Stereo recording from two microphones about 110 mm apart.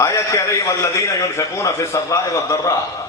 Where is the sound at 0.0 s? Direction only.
30° left (ahead or behind).